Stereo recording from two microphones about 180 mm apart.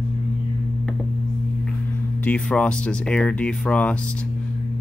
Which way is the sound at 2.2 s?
5° left (ahead or behind).